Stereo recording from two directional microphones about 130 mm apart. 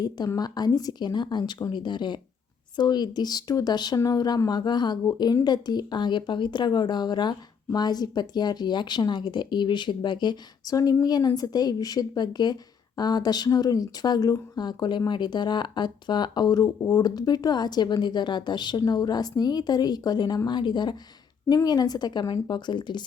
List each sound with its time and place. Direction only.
0.0 s speech: 30° left (ahead or behind)